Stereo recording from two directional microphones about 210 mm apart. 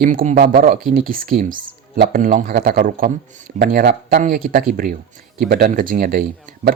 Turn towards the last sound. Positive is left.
turn(degrees=-45)  # may be behind; listen again after turning